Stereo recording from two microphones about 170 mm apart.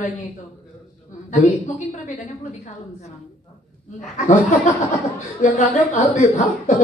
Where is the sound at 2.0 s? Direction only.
45° left (ahead or behind).